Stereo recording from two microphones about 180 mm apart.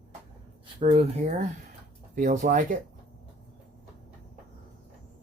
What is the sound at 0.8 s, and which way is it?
Speech, 35° right (ahead or behind).